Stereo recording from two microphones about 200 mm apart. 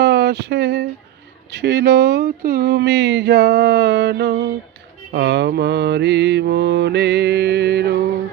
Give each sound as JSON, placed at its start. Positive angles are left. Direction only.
{"t": 0.0, "sound": "speech", "side_deg": -55}